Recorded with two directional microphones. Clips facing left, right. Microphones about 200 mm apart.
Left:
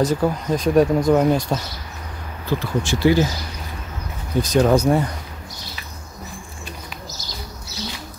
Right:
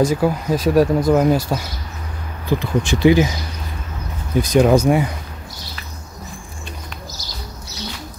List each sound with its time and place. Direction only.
0.0 s speech: 10° right (ahead or behind)
2.6 s speech: 15° right (ahead or behind)
4.4 s speech: 10° right (ahead or behind)